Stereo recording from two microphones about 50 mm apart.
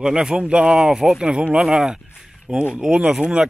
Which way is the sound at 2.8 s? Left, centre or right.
Right.